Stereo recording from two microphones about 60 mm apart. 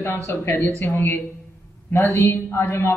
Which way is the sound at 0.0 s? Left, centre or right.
Left.